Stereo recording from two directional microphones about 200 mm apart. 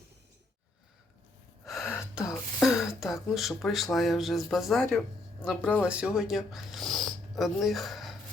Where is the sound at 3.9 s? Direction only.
Centre (ahead or behind).